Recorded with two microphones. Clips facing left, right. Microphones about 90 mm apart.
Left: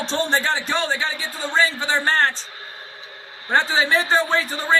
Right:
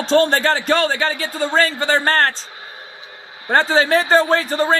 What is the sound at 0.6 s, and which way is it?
Speech, 65° right (ahead or behind).